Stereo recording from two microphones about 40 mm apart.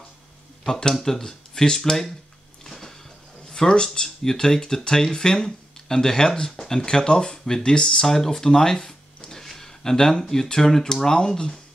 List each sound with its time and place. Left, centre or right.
0.7 s speech: centre
2.6 s a sound: centre
3.4 s speech: centre